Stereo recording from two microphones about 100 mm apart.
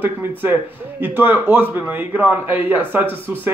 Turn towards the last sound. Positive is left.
turn(degrees=-20)  # may be behind; listen again after turning